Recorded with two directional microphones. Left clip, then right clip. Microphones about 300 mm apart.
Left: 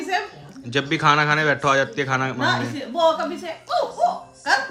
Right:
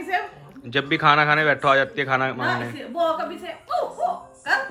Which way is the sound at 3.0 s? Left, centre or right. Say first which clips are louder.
Left 4 dB; left.